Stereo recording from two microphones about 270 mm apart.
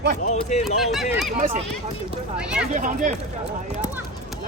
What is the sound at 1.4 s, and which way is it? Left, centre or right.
Speech, right.